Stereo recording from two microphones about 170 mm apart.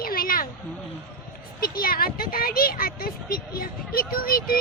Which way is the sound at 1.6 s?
60° left (ahead or behind).